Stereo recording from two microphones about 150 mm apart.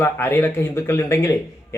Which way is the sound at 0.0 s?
15° left (ahead or behind).